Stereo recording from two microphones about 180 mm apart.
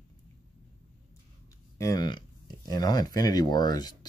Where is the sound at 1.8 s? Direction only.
20° left (ahead or behind).